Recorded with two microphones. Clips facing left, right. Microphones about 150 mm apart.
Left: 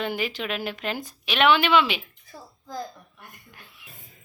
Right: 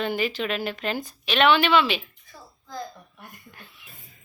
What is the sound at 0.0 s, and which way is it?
Speech, 10° left (ahead or behind).